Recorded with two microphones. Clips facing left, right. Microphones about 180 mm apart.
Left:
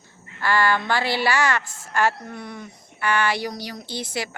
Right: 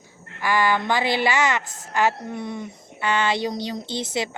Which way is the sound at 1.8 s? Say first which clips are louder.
Right 2 dB; 20° right (ahead or behind).